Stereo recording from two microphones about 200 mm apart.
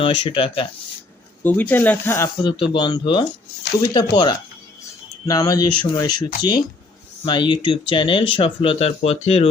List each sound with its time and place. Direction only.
0.0 s speech: 25° left (ahead or behind)
1.5 s speech: 10° left (ahead or behind); by 9.5 s 30° left (ahead or behind)